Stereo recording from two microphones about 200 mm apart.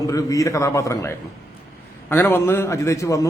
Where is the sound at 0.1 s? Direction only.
15° left (ahead or behind).